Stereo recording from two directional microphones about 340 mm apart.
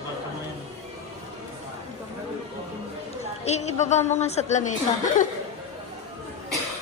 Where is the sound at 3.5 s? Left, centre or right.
Centre.